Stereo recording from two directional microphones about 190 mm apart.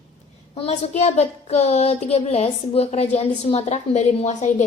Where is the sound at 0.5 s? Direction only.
30° left (ahead or behind).